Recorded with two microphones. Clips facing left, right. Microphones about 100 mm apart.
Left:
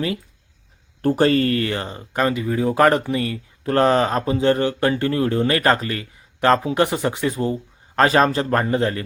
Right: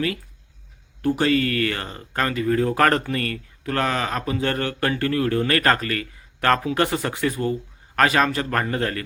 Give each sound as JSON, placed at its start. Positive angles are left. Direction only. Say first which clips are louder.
{"t": 1.0, "sound": "speech", "louder": "left 3 dB", "side_deg": 40}
{"t": 3.6, "sound": "speech", "louder": "left 7 dB", "side_deg": 30}